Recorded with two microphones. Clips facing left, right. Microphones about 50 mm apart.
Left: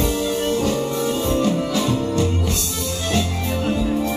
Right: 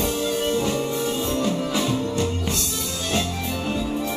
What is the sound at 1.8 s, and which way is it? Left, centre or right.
Music, centre.